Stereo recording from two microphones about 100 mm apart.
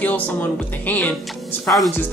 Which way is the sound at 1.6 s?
Centre (ahead or behind).